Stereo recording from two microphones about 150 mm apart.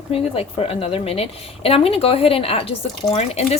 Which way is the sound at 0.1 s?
40° left (ahead or behind).